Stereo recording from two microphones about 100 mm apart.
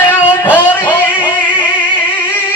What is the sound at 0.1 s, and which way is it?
Music, 15° left (ahead or behind).